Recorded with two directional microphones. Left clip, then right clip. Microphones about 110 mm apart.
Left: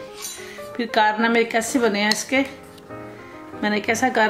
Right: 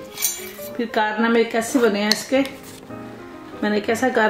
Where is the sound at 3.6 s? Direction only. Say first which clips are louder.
Even; 30° left (ahead or behind).